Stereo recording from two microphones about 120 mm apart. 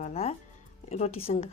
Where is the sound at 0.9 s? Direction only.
55° left (ahead or behind).